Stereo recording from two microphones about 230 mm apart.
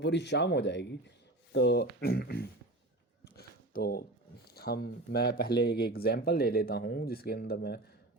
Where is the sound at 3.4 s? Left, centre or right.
Left.